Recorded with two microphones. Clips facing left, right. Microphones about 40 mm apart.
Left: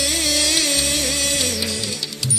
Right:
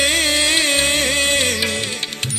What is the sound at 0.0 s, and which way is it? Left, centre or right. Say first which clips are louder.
Music: right 4 dB; right.